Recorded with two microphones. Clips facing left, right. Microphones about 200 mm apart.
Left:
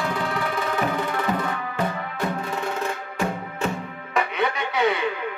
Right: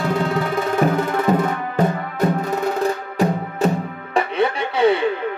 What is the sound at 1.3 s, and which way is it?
Music, 45° right (ahead or behind).